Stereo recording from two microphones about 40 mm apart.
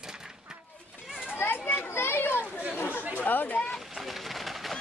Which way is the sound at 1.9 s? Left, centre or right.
Left.